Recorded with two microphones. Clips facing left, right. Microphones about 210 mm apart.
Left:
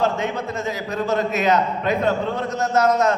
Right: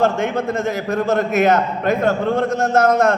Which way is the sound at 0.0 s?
50° right (ahead or behind).